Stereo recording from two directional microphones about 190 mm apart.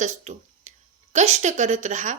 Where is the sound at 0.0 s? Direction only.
40° right (ahead or behind).